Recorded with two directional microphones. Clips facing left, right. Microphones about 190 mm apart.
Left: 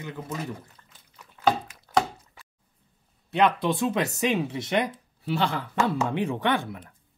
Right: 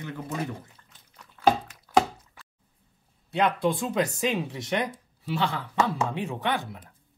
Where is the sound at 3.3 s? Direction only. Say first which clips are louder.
Left 2 dB; 65° left (ahead or behind).